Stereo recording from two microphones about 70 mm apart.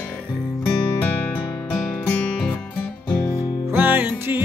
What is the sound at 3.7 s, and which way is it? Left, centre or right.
Music, right.